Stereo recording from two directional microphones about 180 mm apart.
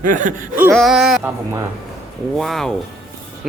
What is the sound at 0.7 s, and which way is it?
Speech, centre (ahead or behind).